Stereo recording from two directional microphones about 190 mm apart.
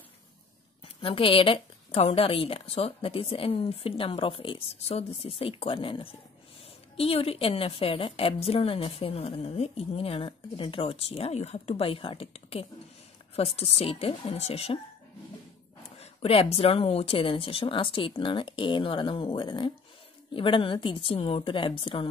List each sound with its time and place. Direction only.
0.8 s a woman's voice: 30° left (ahead or behind)
16.0 s a woman's voice: 30° left (ahead or behind)